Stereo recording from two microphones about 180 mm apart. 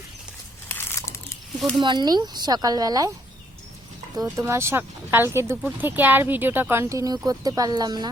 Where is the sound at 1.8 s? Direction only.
25° right (ahead or behind).